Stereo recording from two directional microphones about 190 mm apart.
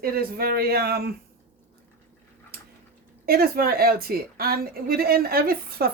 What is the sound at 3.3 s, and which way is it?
Speech, 50° right (ahead or behind).